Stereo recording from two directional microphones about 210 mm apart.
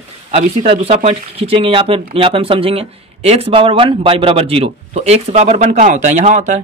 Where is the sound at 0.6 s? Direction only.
30° right (ahead or behind).